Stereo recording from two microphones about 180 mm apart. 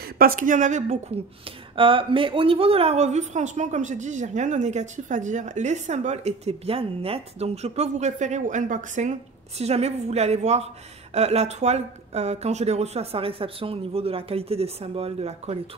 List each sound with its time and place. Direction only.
0.0 s a woman's voice: 55° right (ahead or behind); by 1.2 s 40° right (ahead or behind)
1.8 s speech: 30° right (ahead or behind)